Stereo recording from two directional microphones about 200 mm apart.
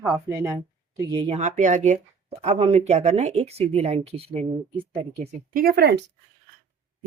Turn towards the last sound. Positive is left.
turn(degrees=-55)  # may be behind; listen again after turning